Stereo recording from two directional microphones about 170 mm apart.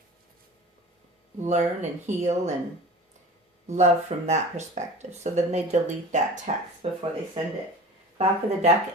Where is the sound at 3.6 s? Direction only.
45° right (ahead or behind).